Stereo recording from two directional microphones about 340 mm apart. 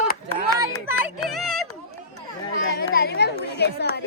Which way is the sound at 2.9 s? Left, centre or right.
Left.